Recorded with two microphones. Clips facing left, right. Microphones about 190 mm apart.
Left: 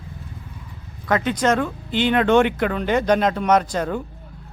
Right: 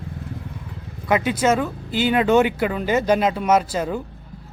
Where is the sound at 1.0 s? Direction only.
10° right (ahead or behind).